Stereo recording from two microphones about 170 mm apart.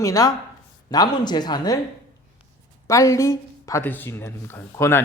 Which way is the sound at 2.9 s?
20° left (ahead or behind).